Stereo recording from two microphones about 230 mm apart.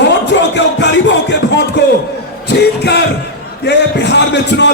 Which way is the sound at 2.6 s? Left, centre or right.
Left.